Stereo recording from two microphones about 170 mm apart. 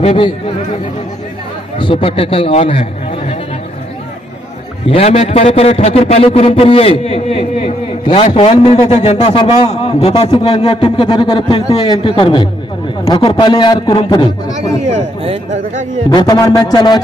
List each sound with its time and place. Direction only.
0.0 s speech: 35° left (ahead or behind)
1.8 s a man's voice: 30° left (ahead or behind)
4.8 s a man's voice: 35° left (ahead or behind)
14.9 s speech: 40° right (ahead or behind)
16.1 s a man's voice: 25° left (ahead or behind)